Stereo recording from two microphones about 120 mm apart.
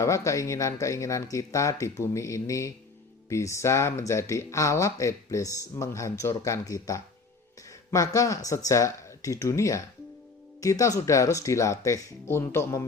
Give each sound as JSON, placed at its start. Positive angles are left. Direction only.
{"t": 0.0, "sound": "speech", "side_deg": 25}